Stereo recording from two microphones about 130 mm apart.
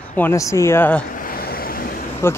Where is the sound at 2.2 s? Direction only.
20° left (ahead or behind).